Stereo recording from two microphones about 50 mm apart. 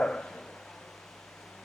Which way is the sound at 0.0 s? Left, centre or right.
Centre.